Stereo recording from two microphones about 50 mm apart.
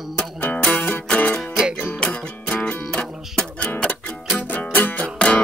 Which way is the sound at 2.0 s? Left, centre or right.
Centre.